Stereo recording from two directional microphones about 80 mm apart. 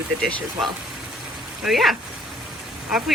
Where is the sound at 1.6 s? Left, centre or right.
Centre.